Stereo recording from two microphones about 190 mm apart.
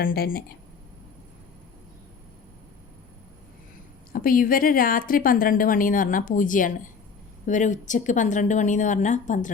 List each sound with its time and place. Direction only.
0.0 s a woman's voice: 50° left (ahead or behind)
4.1 s a woman's voice: 50° left (ahead or behind)